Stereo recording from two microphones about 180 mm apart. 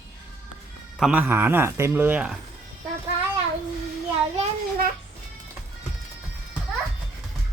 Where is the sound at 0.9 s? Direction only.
5° right (ahead or behind).